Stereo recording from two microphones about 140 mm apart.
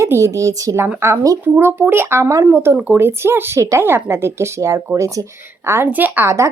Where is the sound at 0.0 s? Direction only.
20° right (ahead or behind).